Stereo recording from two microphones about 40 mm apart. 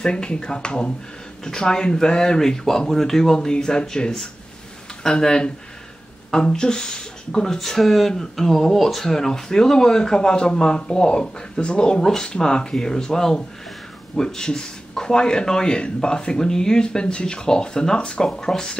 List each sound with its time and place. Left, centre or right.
0.0 s speech: left
5.0 s speech: centre
7.5 s speech: centre